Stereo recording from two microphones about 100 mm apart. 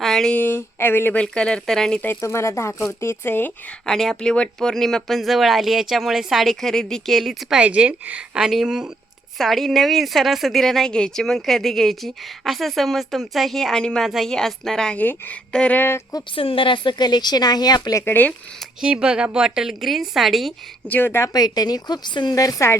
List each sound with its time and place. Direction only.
0.0 s a sound: 5° left (ahead or behind)
0.3 s speech: 20° left (ahead or behind)
1.1 s speech: 10° left (ahead or behind)
2.0 s speech: 25° left (ahead or behind)
3.8 s speech: 5° left (ahead or behind)
7.6 s a woman's voice: 10° right (ahead or behind); by 16.0 s 20° left (ahead or behind)
16.3 s a woman's voice: 65° left (ahead or behind); by 18.0 s 40° left (ahead or behind)
18.0 s speech: 20° left (ahead or behind)
18.8 s a woman's voice: 10° right (ahead or behind)
20.8 s speech: 20° left (ahead or behind)
21.3 s a woman's voice: 40° left (ahead or behind)